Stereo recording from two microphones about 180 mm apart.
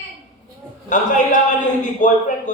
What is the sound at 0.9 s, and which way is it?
Speech, 45° left (ahead or behind).